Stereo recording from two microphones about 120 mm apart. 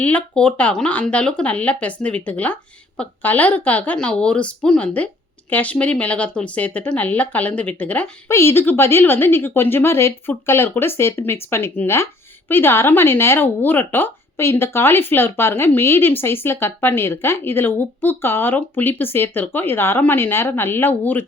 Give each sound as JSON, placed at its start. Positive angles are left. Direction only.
{"t": 0.0, "sound": "a woman's voice", "side_deg": 10}
{"t": 8.3, "sound": "speech", "side_deg": 20}